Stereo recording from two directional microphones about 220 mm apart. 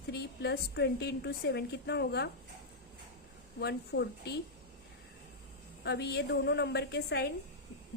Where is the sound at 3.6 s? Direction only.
50° left (ahead or behind).